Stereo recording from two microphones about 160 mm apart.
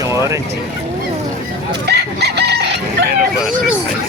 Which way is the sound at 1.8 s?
90° right.